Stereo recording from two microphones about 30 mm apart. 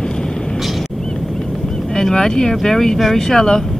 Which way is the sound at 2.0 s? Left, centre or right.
Centre.